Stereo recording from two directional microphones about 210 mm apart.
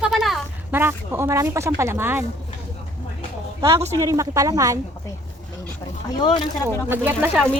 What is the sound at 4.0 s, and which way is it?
Speech, 15° right (ahead or behind).